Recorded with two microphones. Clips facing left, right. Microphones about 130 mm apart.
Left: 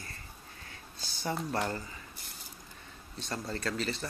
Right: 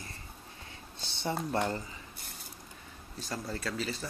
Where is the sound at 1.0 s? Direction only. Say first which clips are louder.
Right 1 dB; 25° right (ahead or behind).